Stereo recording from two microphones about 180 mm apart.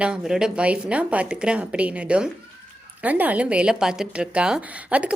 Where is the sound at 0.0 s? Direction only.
5° right (ahead or behind).